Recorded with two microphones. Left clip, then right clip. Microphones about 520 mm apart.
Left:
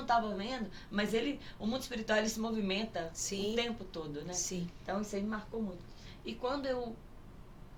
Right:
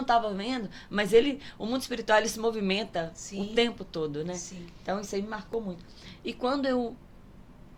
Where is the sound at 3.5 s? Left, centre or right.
Right.